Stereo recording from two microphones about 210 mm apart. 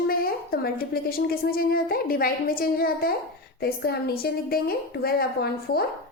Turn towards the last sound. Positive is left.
turn(degrees=45)  # may be behind; listen again after turning